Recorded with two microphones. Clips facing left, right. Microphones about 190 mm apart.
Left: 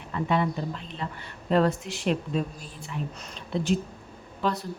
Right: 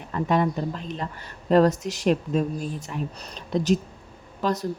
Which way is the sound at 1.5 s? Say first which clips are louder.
Right 5 dB; 40° right (ahead or behind).